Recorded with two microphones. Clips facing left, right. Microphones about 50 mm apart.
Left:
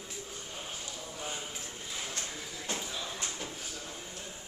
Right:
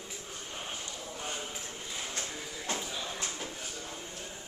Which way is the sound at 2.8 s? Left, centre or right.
Centre.